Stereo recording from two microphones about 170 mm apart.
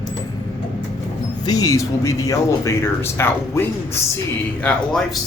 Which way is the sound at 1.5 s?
20° left (ahead or behind).